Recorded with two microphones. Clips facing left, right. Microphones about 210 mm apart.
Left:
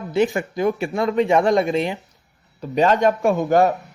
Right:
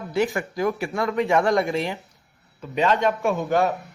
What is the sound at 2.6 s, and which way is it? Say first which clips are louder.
A man's voice: left 4 dB; 40° left (ahead or behind).